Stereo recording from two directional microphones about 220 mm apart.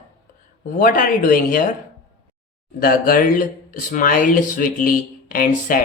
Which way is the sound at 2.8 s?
40° left (ahead or behind).